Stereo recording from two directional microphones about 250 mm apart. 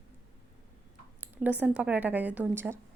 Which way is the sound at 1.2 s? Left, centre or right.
Centre.